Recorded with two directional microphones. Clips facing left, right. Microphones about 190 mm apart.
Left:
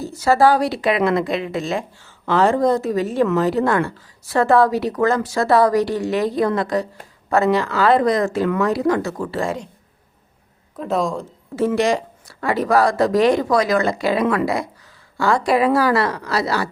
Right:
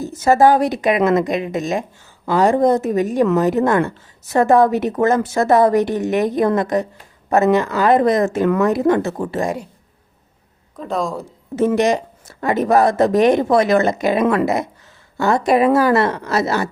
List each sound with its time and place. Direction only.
0.0 s a woman's voice: 20° right (ahead or behind)
10.8 s speech: centre (ahead or behind)
11.5 s a woman's voice: 20° right (ahead or behind)